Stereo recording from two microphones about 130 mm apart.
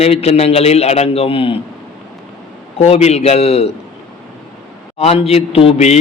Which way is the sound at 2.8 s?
55° left (ahead or behind).